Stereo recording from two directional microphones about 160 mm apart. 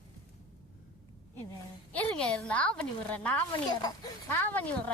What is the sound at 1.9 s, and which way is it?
Speech, 5° left (ahead or behind).